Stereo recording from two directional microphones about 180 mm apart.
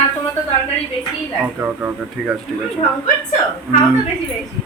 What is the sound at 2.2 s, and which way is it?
Speech, 5° right (ahead or behind).